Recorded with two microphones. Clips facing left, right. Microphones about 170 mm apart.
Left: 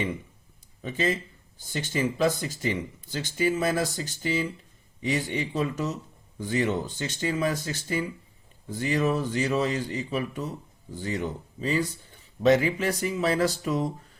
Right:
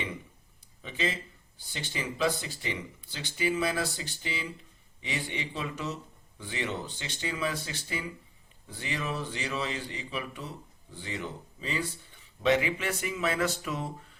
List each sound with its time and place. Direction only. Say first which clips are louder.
0.8 s speech: left 6 dB; 45° left (ahead or behind)